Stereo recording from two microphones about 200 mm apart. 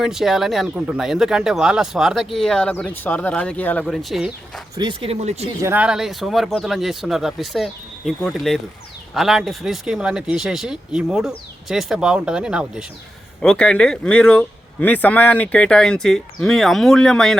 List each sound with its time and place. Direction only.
0.0 s speech: centre (ahead or behind)
4.7 s speech: 20° right (ahead or behind)
5.6 s speech: 5° right (ahead or behind)